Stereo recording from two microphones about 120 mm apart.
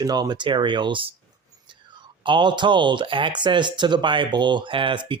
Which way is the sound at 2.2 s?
40° right (ahead or behind).